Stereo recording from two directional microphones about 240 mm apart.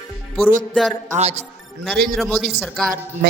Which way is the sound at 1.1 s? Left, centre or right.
Right.